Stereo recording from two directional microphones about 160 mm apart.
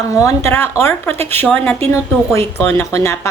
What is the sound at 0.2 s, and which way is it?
A woman's voice, 15° left (ahead or behind).